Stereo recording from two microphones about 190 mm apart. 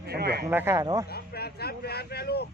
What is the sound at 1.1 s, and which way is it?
Speech, 55° left (ahead or behind).